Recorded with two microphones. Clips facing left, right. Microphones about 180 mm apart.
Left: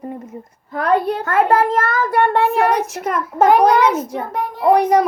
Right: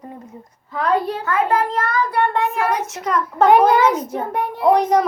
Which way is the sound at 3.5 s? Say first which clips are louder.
Even; centre (ahead or behind).